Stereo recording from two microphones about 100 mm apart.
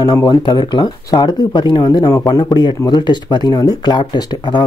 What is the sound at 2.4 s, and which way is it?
Speech, 50° left (ahead or behind).